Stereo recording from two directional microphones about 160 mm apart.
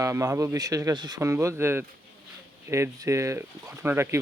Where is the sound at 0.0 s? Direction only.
20° right (ahead or behind).